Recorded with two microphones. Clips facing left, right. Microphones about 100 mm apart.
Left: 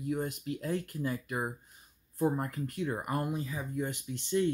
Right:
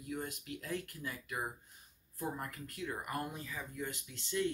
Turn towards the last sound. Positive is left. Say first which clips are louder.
# left 7 dB
turn(degrees=20)  # may be behind; listen again after turning